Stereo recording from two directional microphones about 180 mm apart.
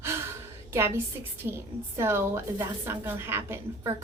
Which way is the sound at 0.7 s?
15° right (ahead or behind).